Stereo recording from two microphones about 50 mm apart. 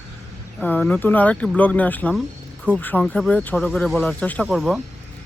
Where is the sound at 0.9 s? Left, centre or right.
Left.